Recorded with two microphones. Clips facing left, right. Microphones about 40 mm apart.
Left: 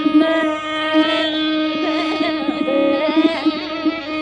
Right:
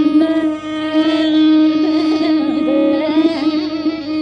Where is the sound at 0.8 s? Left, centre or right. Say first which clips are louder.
Right 3 dB; left.